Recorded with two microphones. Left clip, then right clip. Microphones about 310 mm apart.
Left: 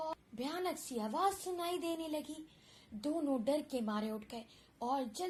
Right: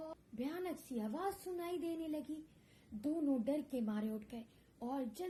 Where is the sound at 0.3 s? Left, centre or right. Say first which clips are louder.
Left 2 dB; left.